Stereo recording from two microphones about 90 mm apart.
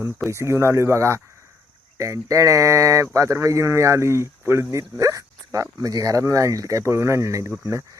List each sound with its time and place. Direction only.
0.3 s speech: 30° right (ahead or behind)